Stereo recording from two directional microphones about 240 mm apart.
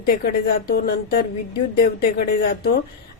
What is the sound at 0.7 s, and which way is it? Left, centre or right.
Speech, left.